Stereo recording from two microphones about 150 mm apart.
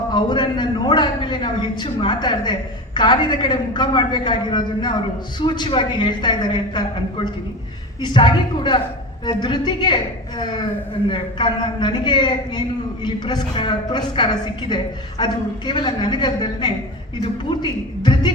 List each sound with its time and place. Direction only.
0.1 s a woman's voice: 30° left (ahead or behind)